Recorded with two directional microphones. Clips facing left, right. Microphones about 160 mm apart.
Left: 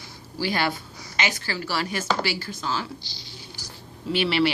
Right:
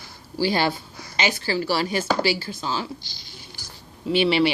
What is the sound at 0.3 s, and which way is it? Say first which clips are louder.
A woman's voice: right 4 dB; 30° right (ahead or behind).